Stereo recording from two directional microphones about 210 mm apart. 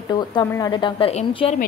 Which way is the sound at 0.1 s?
20° left (ahead or behind).